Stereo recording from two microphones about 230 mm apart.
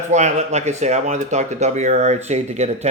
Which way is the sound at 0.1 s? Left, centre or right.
Right.